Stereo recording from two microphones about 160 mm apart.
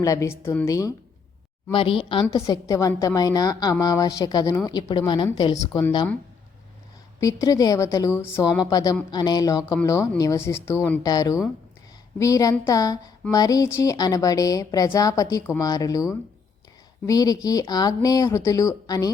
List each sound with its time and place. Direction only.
0.0 s a woman's voice: 20° left (ahead or behind)
1.7 s speech: 35° left (ahead or behind)
2.2 s a woman's voice: 20° left (ahead or behind)
7.2 s a woman's voice: 20° left (ahead or behind)
11.0 s a woman's voice: 25° left (ahead or behind)